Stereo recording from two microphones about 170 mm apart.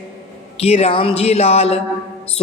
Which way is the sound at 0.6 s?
35° left (ahead or behind).